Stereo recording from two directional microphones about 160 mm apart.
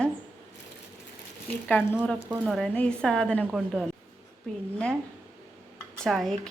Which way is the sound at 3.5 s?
5° right (ahead or behind).